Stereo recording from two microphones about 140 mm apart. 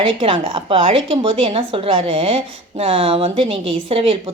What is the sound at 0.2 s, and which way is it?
A woman's voice, 40° right (ahead or behind).